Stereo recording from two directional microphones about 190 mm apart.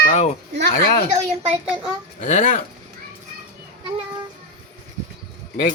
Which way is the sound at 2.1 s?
40° left (ahead or behind).